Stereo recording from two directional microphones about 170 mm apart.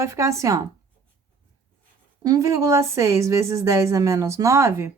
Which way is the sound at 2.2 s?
20° right (ahead or behind).